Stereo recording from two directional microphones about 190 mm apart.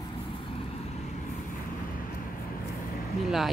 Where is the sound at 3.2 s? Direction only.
Centre (ahead or behind).